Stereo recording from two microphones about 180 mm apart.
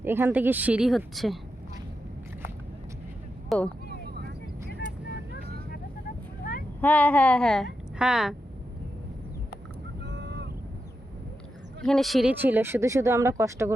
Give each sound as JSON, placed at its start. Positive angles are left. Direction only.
{"t": 0.0, "sound": "speech", "side_deg": -10}
{"t": 3.5, "sound": "a woman's voice", "side_deg": 0}
{"t": 4.1, "sound": "vehicle", "side_deg": -60}
{"t": 4.8, "sound": "vehicle", "side_deg": 70}
{"t": 6.8, "sound": "a woman's voice", "side_deg": 10}
{"t": 10.1, "sound": "a sound", "side_deg": -70}
{"t": 11.9, "sound": "a woman's voice", "side_deg": 0}
{"t": 12.3, "sound": "speech", "side_deg": -10}